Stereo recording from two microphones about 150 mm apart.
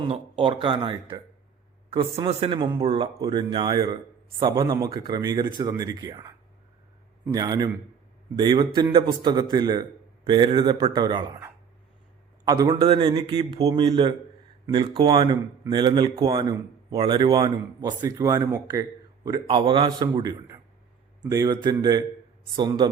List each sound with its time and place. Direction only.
0.0 s speech: 35° right (ahead or behind)
7.3 s speech: 25° right (ahead or behind)
12.6 s speech: 35° right (ahead or behind)